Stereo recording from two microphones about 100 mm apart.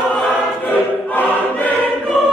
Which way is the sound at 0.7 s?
15° left (ahead or behind).